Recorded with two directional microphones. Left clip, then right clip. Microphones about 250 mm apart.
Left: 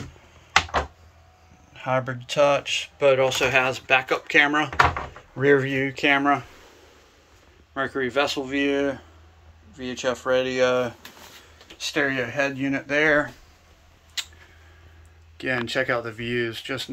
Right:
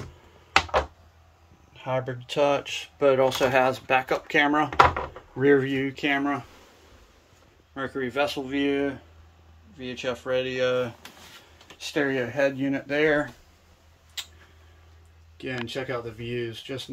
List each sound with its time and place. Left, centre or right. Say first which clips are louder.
1.7 s speech: left 4 dB; centre
7.7 s speech: left 5 dB; centre
14.2 s tick-tock: left 5 dB; centre
15.3 s speech: left 7 dB; centre